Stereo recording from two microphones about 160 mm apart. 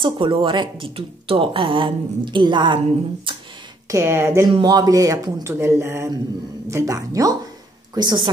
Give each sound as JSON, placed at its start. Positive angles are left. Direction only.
{"t": 0.0, "sound": "speech", "side_deg": -30}
{"t": 3.9, "sound": "speech", "side_deg": -15}
{"t": 4.5, "sound": "speech", "side_deg": -30}